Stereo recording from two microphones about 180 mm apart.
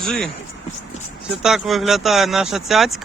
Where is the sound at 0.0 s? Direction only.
5° left (ahead or behind).